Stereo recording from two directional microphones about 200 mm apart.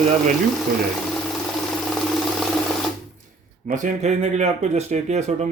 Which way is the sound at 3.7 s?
35° right (ahead or behind).